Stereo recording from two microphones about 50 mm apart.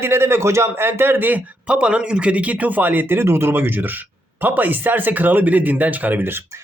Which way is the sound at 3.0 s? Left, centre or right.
Right.